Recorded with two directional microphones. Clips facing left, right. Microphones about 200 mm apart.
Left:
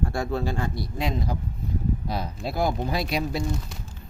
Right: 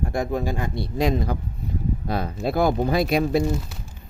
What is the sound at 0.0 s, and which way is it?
Speech, 20° right (ahead or behind).